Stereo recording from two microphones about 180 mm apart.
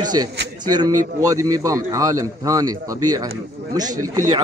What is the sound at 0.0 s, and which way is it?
A man's voice, 25° right (ahead or behind).